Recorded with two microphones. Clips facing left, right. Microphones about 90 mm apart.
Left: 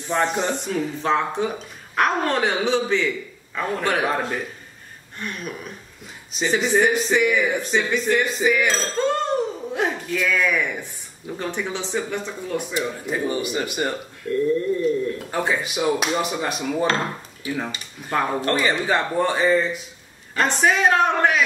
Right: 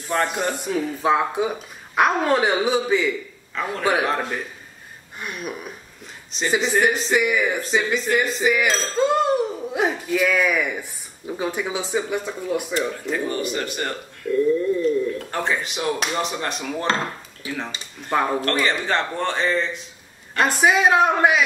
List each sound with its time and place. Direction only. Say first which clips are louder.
0.1 s speech: left 1 dB; centre (ahead or behind)
3.5 s speech: right 1 dB; 5° left (ahead or behind)
5.2 s speech: right 1 dB; 10° right (ahead or behind)
6.3 s speech: left 1 dB; centre (ahead or behind)
12.7 s speech: right 1 dB; 10° left (ahead or behind)
18.4 s speech: left 1 dB; 10° left (ahead or behind)
20.3 s speech: right 1 dB; 5° right (ahead or behind)